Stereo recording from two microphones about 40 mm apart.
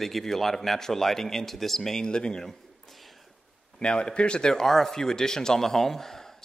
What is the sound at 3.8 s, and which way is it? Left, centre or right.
Speech, left.